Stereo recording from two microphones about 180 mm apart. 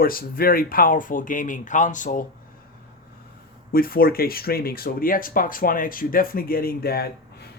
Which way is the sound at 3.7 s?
55° left (ahead or behind).